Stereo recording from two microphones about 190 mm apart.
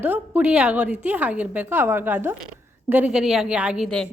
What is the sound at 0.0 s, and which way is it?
A woman's voice, 10° right (ahead or behind).